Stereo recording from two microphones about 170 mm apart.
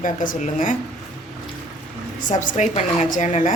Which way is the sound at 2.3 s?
45° left (ahead or behind).